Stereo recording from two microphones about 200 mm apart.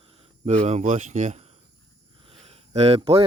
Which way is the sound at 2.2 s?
30° right (ahead or behind).